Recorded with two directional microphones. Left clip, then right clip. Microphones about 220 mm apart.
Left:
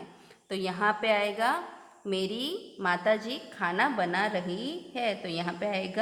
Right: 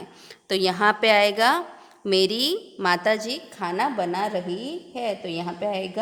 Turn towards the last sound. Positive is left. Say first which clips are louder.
# right 4 dB
turn(degrees=-25)  # may be behind; listen again after turning